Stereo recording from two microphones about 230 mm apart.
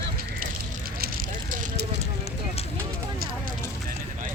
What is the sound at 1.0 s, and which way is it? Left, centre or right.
Vehicle, right.